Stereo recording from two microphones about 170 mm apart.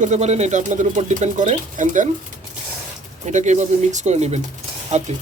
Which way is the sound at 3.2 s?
45° right (ahead or behind).